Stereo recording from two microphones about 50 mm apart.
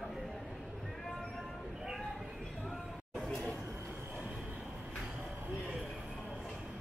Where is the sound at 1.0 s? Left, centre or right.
Centre.